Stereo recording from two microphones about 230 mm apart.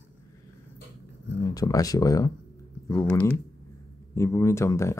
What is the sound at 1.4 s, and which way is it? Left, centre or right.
Speech, centre.